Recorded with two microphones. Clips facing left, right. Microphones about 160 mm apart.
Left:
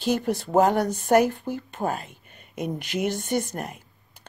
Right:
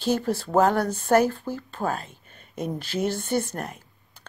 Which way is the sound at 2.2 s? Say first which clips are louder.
Even; 10° left (ahead or behind).